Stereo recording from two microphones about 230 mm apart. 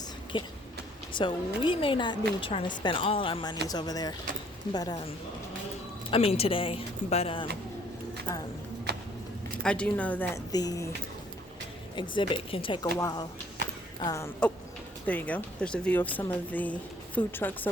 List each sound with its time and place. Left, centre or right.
0.3 s speech: left
9.6 s speech: centre
11.9 s speech: left